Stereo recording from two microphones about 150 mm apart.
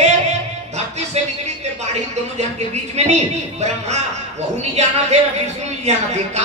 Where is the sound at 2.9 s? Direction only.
45° right (ahead or behind).